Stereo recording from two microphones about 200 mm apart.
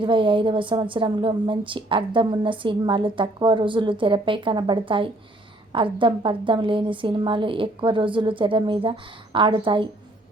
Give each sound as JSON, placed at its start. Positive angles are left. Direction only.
{"t": 0.0, "sound": "a woman's voice", "side_deg": -25}